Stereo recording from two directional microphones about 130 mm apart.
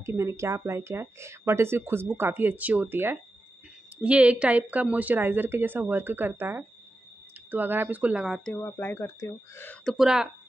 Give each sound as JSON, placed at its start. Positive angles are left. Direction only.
{"t": 0.0, "sound": "speech", "side_deg": -20}
{"t": 8.5, "sound": "speech", "side_deg": 15}
{"t": 9.8, "sound": "speech", "side_deg": -5}